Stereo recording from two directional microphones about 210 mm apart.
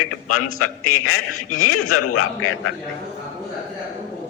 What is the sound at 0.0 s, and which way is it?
A man's voice, 90° left.